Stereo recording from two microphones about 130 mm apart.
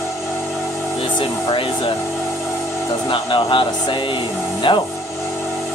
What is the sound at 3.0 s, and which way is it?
Speech, 45° left (ahead or behind).